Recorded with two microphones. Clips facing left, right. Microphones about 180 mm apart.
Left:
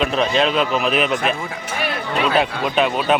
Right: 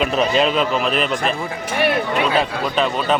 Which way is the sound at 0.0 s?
5° right (ahead or behind).